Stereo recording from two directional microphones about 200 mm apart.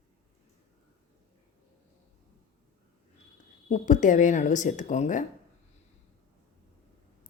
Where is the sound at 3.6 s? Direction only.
35° left (ahead or behind).